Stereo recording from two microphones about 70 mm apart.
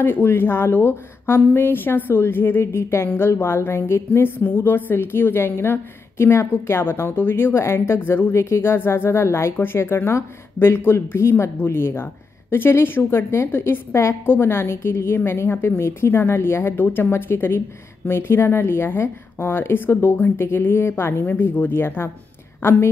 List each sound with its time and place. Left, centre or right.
0.0 s a woman's voice: left